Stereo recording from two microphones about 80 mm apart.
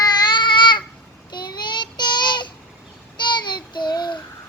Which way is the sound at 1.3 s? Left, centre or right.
Left.